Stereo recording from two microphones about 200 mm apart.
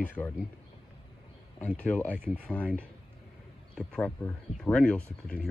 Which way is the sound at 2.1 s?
10° right (ahead or behind).